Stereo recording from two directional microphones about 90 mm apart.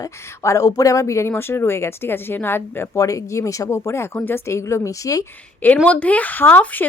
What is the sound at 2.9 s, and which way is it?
Speech, 40° left (ahead or behind).